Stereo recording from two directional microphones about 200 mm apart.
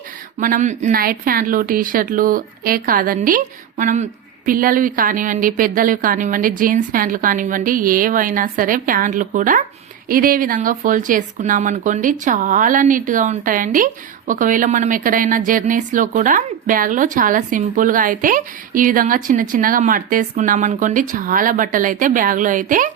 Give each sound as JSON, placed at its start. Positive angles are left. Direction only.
{"t": 0.3, "sound": "speech", "side_deg": -40}